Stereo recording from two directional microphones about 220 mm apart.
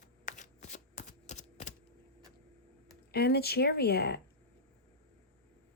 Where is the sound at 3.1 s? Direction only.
45° left (ahead or behind).